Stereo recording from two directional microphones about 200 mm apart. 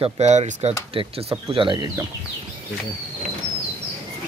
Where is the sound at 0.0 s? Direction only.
35° right (ahead or behind).